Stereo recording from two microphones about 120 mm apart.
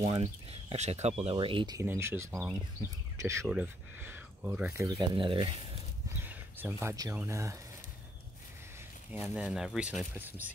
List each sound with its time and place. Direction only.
0.0 s speech: 55° right (ahead or behind)
1.8 s speech: 20° right (ahead or behind)
4.7 s speech: 30° right (ahead or behind)
5.1 s speech: 45° right (ahead or behind)
6.2 s a sound: 20° right (ahead or behind)
7.2 s speech: 25° right (ahead or behind)
9.1 s speech: 10° right (ahead or behind)